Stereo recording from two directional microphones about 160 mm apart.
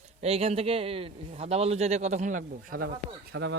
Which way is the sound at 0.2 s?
40° right (ahead or behind).